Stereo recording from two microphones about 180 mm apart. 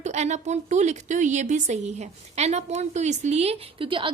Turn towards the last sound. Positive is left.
turn(degrees=-30)  # may be behind; listen again after turning